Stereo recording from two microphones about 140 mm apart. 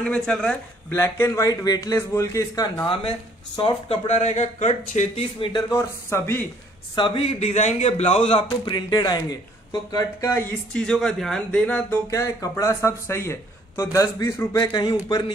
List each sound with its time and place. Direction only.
0.0 s speech: 5° left (ahead or behind)
0.9 s speech: 20° left (ahead or behind)
2.9 s speech: 40° left (ahead or behind)
4.1 s speech: 50° left (ahead or behind)
5.7 s speech: 20° left (ahead or behind)
7.0 s a man's voice: 40° left (ahead or behind)
8.6 s speech: 30° left (ahead or behind)
10.7 s speech: 5° left (ahead or behind)
12.1 s speech: 25° left (ahead or behind)